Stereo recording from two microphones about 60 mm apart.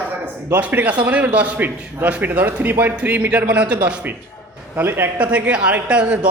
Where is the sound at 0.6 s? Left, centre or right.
Right.